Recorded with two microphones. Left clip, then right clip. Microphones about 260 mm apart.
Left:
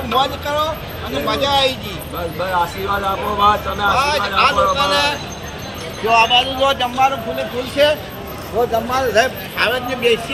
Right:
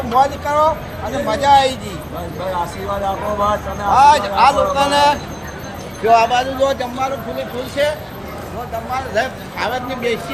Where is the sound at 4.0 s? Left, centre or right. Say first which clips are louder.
Right 8 dB; right.